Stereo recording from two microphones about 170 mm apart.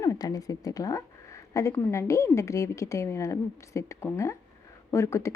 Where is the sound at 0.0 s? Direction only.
20° left (ahead or behind).